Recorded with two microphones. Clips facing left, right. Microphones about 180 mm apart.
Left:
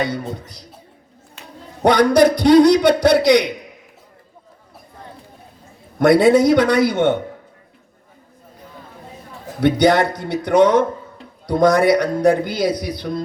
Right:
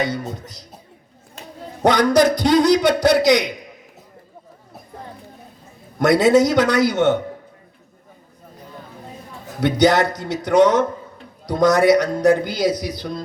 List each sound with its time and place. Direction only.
0.0 s a man's voice: 60° left (ahead or behind)
1.8 s a man's voice: 60° left (ahead or behind)
6.0 s a man's voice: 60° left (ahead or behind)
9.6 s a man's voice: 60° left (ahead or behind)